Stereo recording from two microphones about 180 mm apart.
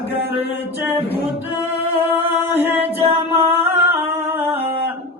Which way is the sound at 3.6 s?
35° right (ahead or behind).